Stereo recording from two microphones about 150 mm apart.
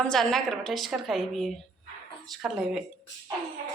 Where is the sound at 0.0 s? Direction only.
5° left (ahead or behind).